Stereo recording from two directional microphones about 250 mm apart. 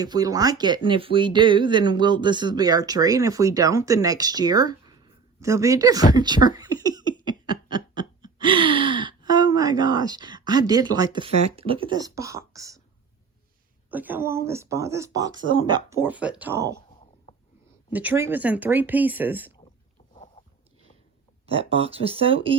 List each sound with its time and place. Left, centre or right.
0.0 s speech: centre
6.1 s a sound: centre
13.9 s speech: centre
17.9 s speech: centre
21.4 s speech: right